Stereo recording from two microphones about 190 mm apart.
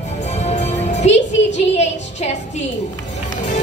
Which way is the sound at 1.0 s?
35° left (ahead or behind).